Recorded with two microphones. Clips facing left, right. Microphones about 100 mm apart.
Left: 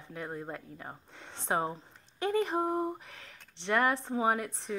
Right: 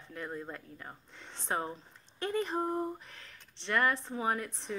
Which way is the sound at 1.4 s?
20° left (ahead or behind).